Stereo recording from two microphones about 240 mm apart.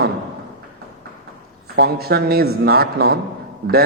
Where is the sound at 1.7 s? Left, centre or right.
Right.